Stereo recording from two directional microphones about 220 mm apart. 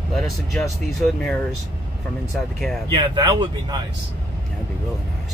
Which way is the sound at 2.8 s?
20° right (ahead or behind).